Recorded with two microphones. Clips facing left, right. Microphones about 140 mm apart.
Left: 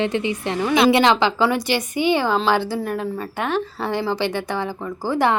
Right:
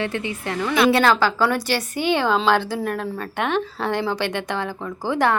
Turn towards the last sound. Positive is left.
turn(degrees=10)  # may be behind; listen again after turning